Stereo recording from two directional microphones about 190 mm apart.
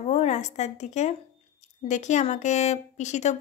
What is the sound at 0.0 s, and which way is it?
A woman's voice, 35° left (ahead or behind).